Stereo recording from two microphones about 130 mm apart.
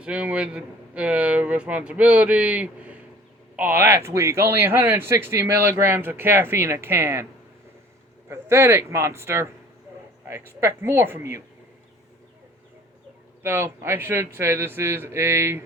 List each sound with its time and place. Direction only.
0.0 s speech: 10° right (ahead or behind)
8.3 s speech: 20° right (ahead or behind)
13.4 s speech: 15° right (ahead or behind)